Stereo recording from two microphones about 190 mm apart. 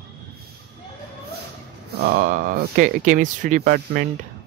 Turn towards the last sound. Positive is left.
turn(degrees=-50)  # may be behind; listen again after turning